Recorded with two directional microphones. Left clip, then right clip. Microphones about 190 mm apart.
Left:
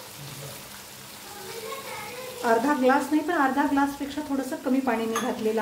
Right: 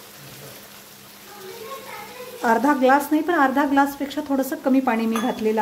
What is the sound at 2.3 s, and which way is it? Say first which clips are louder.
Speech: right 4 dB; 55° right (ahead or behind).